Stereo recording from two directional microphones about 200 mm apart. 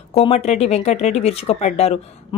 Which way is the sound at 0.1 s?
30° left (ahead or behind).